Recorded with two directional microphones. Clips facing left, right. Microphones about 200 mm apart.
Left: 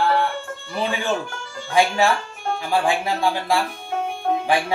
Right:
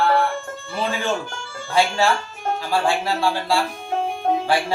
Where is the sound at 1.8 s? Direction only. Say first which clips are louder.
Left 1 dB; 15° left (ahead or behind).